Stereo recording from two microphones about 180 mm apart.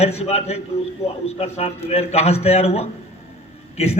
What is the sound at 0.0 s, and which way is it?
A man's voice, 35° left (ahead or behind).